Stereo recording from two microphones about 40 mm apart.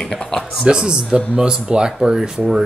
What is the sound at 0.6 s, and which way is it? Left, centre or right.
Speech, right.